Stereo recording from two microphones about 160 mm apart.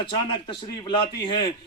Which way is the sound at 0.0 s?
30° left (ahead or behind).